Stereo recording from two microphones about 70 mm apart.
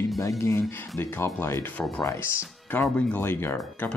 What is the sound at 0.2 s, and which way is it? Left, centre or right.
Speech, left.